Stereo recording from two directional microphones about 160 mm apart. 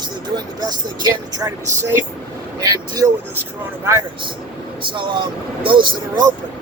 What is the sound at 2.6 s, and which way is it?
Speech, 25° right (ahead or behind).